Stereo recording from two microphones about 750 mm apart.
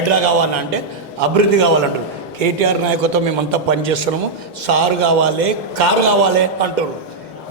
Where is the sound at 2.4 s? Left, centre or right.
Right.